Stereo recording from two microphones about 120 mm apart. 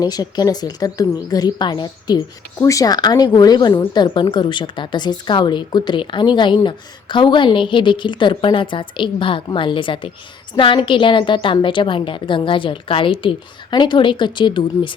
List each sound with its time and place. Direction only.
0.0 s a woman's voice: 35° left (ahead or behind)